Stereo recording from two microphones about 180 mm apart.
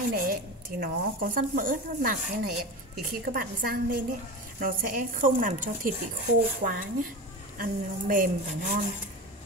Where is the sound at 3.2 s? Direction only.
55° right (ahead or behind).